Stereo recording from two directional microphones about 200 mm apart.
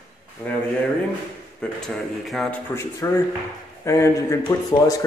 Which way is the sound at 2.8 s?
15° left (ahead or behind).